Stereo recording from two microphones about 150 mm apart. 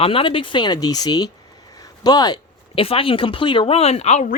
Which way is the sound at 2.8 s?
40° left (ahead or behind).